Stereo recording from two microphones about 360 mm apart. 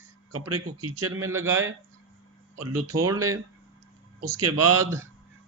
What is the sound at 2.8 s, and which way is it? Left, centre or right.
Speech, centre.